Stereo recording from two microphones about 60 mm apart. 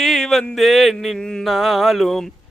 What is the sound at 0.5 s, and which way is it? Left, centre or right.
Speech, centre.